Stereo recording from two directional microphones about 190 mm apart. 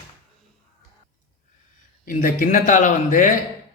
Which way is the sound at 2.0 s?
45° left (ahead or behind).